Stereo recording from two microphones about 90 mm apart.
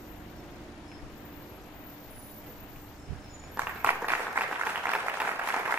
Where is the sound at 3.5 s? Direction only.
20° right (ahead or behind).